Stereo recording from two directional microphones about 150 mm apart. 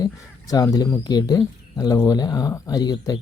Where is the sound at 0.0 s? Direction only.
25° left (ahead or behind).